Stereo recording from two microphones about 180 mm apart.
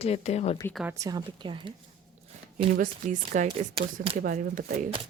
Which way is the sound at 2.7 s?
50° right (ahead or behind).